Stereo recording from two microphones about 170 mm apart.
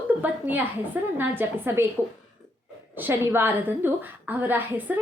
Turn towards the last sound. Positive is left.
turn(degrees=-10)  # may be behind; listen again after turning